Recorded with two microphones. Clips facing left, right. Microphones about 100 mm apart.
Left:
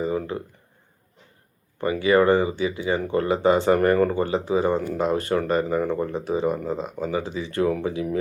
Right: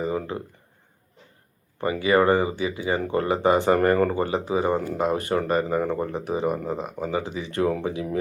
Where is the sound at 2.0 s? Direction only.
20° right (ahead or behind).